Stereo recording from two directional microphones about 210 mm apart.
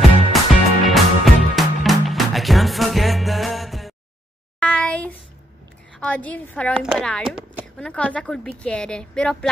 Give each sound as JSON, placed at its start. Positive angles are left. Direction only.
{"t": 0.3, "sound": "music", "side_deg": 0}
{"t": 4.6, "sound": "a sound", "side_deg": 5}
{"t": 5.9, "sound": "speech", "side_deg": 5}